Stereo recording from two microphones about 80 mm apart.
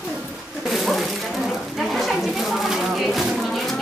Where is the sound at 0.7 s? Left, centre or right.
Centre.